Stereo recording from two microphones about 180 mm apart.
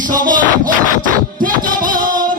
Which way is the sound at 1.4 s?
50° right (ahead or behind).